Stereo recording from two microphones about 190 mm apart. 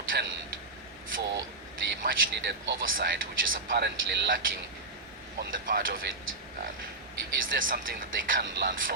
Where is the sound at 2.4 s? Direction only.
65° right (ahead or behind).